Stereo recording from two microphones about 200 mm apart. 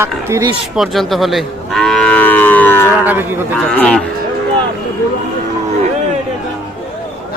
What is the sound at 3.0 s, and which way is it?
Speech, 10° right (ahead or behind).